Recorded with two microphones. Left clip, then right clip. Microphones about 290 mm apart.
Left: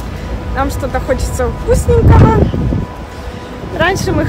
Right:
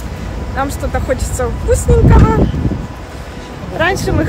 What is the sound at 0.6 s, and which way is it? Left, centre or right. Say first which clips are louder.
Speech: left 2 dB; centre.